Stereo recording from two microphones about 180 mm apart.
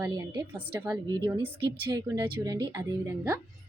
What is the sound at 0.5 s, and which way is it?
Speech, 10° right (ahead or behind).